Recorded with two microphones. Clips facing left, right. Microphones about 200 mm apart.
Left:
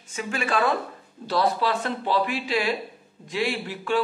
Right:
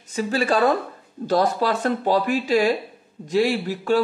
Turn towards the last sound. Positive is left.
turn(degrees=-40)  # may be behind; listen again after turning